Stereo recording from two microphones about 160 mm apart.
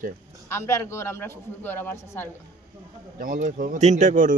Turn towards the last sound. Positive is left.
turn(degrees=-50)  # may be behind; listen again after turning